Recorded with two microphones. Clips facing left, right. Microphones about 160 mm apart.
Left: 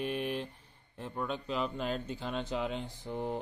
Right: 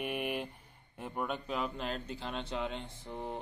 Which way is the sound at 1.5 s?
Centre (ahead or behind).